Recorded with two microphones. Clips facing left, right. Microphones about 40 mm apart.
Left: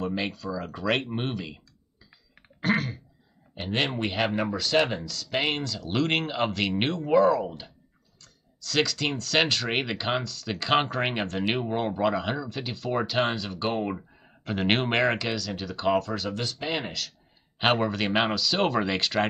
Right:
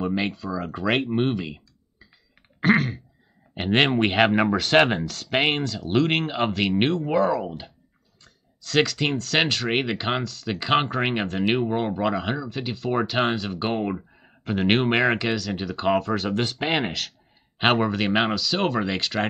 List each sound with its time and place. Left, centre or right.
0.0 s speech: centre
3.5 s speech: right
5.6 s speech: centre
8.6 s speech: centre
16.5 s speech: right
17.6 s speech: centre